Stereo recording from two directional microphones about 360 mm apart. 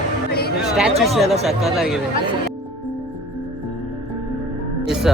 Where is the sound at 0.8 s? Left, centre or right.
Centre.